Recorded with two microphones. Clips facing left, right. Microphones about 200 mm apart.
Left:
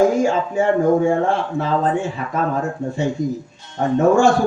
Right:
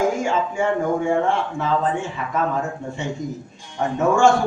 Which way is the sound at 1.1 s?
40° left (ahead or behind).